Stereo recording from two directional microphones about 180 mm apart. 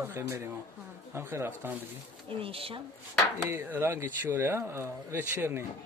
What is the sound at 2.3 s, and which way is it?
Speech, 30° right (ahead or behind).